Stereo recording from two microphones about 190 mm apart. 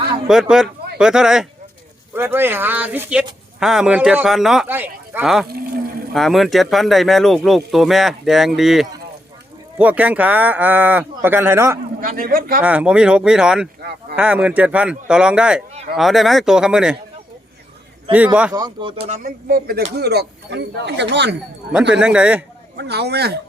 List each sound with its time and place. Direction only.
0.3 s speech: 5° right (ahead or behind)
5.5 s speech: 55° right (ahead or behind)
6.1 s speech: centre (ahead or behind)
11.9 s speech: 50° right (ahead or behind)
12.6 s speech: 5° right (ahead or behind)
18.1 s a man's voice: 25° right (ahead or behind)
19.0 s speech: 40° right (ahead or behind); by 21.3 s 65° right (ahead or behind)
21.9 s speech: 5° right (ahead or behind)
22.8 s speech: 60° right (ahead or behind)